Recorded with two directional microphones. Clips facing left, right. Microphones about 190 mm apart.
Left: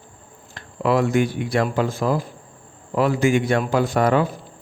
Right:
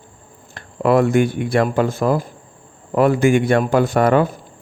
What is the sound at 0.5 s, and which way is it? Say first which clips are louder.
A man's voice: right 4 dB; 55° right (ahead or behind).